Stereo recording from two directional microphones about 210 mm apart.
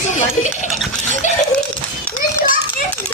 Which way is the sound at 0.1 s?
35° left (ahead or behind).